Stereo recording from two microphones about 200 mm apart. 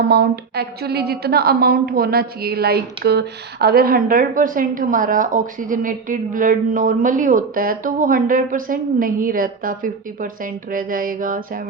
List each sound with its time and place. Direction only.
0.1 s a woman's voice: 55° right (ahead or behind)